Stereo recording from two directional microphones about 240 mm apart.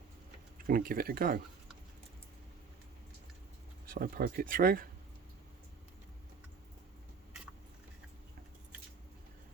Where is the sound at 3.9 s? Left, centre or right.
Right.